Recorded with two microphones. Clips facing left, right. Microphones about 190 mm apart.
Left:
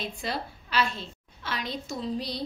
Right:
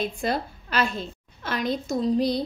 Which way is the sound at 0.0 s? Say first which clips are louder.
Right 7 dB; 50° right (ahead or behind).